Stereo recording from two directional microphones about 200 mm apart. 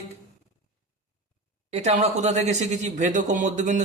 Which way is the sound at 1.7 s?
35° right (ahead or behind).